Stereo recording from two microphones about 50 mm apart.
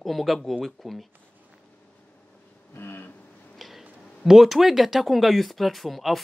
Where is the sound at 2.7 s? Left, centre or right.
Left.